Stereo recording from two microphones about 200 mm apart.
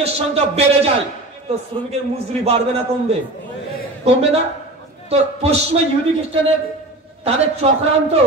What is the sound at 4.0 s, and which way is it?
A man's voice, 30° right (ahead or behind).